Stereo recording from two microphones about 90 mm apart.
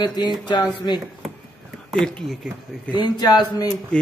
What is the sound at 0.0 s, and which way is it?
Speech, 50° left (ahead or behind).